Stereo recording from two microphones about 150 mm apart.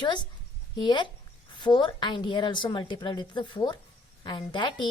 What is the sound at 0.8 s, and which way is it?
A woman's voice, 30° left (ahead or behind).